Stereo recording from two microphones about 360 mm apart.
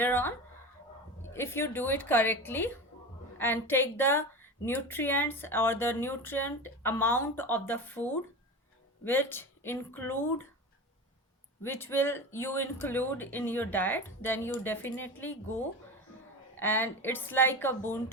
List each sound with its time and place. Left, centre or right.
0.0 s speech: centre
11.6 s speech: centre